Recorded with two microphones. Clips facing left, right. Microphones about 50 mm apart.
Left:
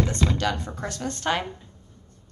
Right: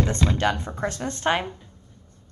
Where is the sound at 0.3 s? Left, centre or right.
Right.